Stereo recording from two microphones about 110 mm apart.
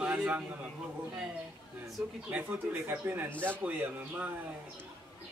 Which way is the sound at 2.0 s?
5° right (ahead or behind).